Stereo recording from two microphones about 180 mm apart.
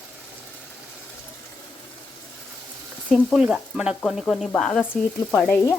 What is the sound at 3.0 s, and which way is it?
Frying, centre (ahead or behind).